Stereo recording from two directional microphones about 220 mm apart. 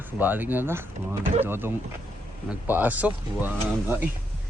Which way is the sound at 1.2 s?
30° right (ahead or behind).